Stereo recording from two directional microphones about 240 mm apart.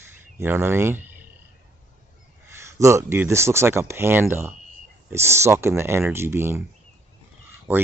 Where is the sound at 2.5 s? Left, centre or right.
Centre.